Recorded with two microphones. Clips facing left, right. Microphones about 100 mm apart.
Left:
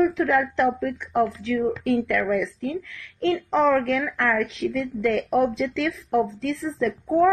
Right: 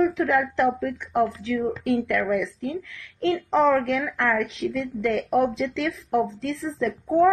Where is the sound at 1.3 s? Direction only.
30° right (ahead or behind).